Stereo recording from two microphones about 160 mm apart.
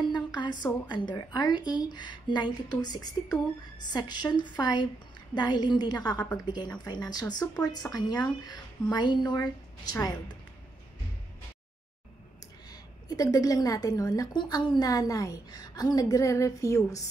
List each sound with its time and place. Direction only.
0.1 s a sound: 25° left (ahead or behind)
0.8 s a woman's voice: 30° left (ahead or behind)
12.6 s a woman's voice: 25° left (ahead or behind)